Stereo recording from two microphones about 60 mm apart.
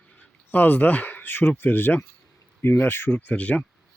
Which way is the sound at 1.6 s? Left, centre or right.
Left.